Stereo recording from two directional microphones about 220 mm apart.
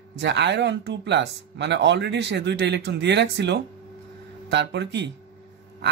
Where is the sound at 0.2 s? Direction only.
50° right (ahead or behind).